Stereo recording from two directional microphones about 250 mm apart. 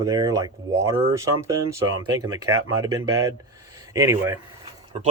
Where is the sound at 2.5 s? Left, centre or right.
Right.